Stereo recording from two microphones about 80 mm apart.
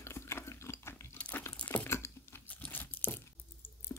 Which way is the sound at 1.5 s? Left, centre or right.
Centre.